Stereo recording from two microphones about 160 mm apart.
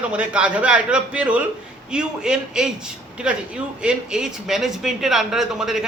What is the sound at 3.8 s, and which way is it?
A man's voice, 5° right (ahead or behind).